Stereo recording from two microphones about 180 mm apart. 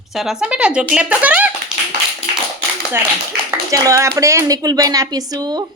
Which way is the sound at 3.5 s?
20° right (ahead or behind).